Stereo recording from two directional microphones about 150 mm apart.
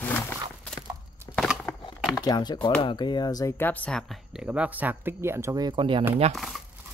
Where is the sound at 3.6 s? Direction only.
10° left (ahead or behind); by 6.0 s 35° right (ahead or behind).